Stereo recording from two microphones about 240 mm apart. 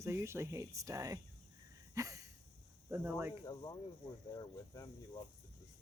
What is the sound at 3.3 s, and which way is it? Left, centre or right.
Speech, centre.